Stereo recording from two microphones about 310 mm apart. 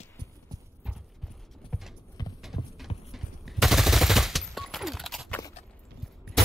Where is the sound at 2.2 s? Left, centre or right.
Centre.